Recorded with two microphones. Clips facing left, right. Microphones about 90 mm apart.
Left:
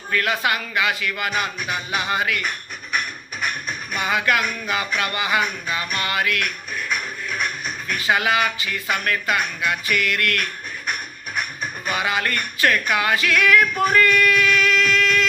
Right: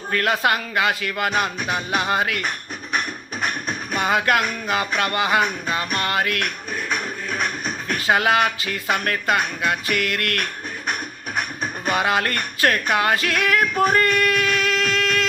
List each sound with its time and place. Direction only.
0.1 s speech: 45° right (ahead or behind)
3.4 s music: 40° right (ahead or behind)
4.4 s speech: 45° right (ahead or behind)
6.9 s music: 35° right (ahead or behind)
7.9 s speech: 45° right (ahead or behind)